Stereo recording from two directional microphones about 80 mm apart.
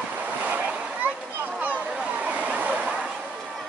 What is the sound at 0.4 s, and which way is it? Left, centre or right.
Splash, centre.